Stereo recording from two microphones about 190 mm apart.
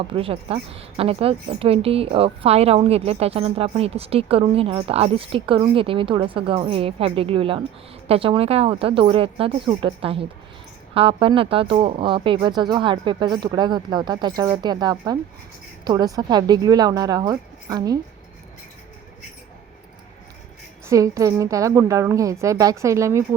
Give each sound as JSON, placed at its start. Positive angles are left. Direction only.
{"t": 0.1, "sound": "a woman's voice", "side_deg": -30}
{"t": 20.8, "sound": "a woman's voice", "side_deg": -15}